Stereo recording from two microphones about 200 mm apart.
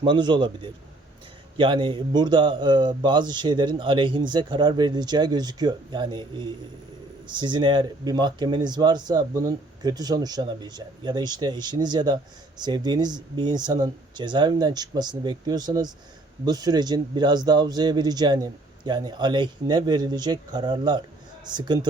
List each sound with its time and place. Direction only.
0.0 s speech: 25° right (ahead or behind)